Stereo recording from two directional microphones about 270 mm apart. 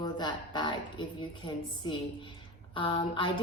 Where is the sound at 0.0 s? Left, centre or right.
Centre.